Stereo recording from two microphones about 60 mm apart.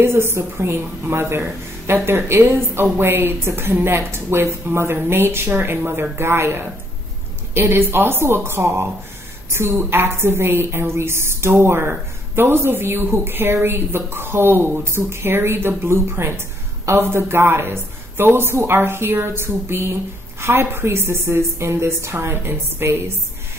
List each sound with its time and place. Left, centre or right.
0.0 s a woman's voice: right